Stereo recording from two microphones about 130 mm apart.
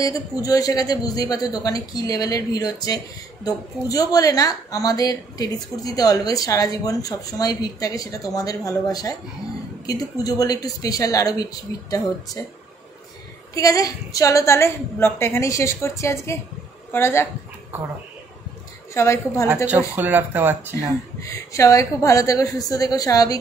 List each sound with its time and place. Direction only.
0.0 s speech: 25° left (ahead or behind)
13.6 s speech: 25° left (ahead or behind)
18.9 s speech: 20° left (ahead or behind)
20.0 s speech: 15° right (ahead or behind)
21.2 s speech: 25° left (ahead or behind)